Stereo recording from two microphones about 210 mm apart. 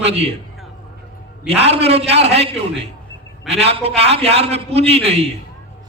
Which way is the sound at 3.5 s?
30° right (ahead or behind).